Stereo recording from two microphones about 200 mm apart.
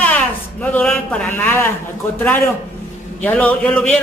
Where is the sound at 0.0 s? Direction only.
5° left (ahead or behind).